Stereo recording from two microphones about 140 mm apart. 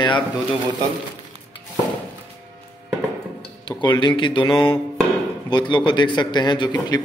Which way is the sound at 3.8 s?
35° left (ahead or behind).